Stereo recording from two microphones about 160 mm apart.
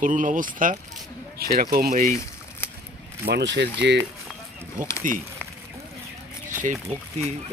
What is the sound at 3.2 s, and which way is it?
Speech, 90° right.